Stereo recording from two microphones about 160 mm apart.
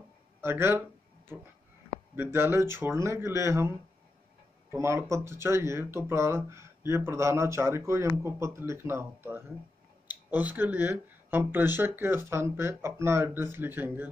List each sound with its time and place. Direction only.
0.4 s speech: 15° right (ahead or behind)
2.1 s speech: 15° right (ahead or behind)